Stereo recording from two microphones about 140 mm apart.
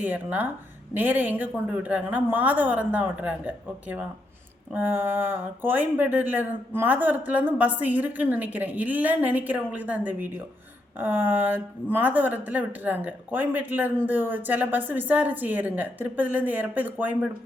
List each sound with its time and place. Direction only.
0.0 s speech: 10° right (ahead or behind)